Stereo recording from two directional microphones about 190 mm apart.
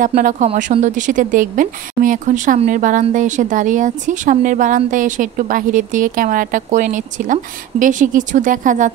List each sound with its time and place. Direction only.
0.0 s a woman's voice: 40° right (ahead or behind)